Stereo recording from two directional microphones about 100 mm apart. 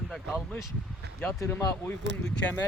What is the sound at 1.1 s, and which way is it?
Speech, 20° left (ahead or behind).